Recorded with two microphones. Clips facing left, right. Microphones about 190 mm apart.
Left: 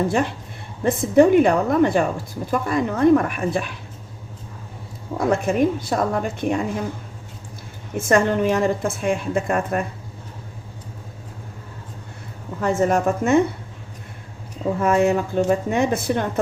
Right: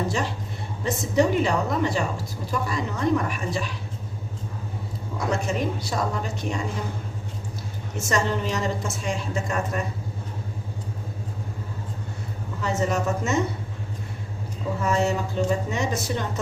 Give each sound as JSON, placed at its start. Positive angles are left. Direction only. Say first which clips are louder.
{"t": 0.9, "sound": "a woman's voice", "louder": "left 8 dB", "side_deg": 55}
{"t": 5.1, "sound": "a woman's voice", "louder": "left 7 dB", "side_deg": 55}
{"t": 7.9, "sound": "a woman's voice", "louder": "left 7 dB", "side_deg": 55}
{"t": 12.6, "sound": "a woman's voice", "louder": "left 6 dB", "side_deg": 50}
{"t": 14.8, "sound": "a woman's voice", "louder": "left 6 dB", "side_deg": 55}